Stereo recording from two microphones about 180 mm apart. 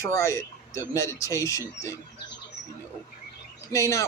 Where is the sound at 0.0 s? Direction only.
15° left (ahead or behind).